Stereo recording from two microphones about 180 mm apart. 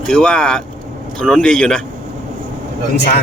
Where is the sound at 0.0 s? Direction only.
5° left (ahead or behind).